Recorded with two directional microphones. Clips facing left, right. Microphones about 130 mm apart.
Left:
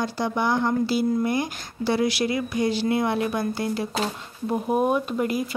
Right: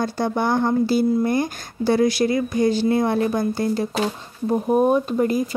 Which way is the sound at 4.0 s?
10° right (ahead or behind).